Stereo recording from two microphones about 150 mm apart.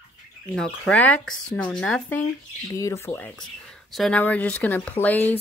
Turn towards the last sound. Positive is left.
turn(degrees=10)  # may be behind; listen again after turning